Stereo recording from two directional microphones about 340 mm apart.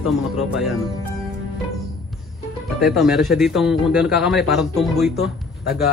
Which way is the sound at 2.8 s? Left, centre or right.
Centre.